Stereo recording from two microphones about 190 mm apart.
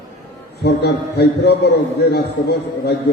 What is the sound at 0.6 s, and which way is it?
A man's voice, 60° left (ahead or behind).